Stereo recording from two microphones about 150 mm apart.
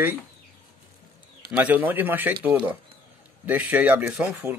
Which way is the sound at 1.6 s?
10° right (ahead or behind).